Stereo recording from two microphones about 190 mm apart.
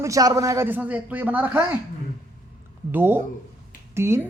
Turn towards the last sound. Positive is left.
turn(degrees=-15)  # may be behind; listen again after turning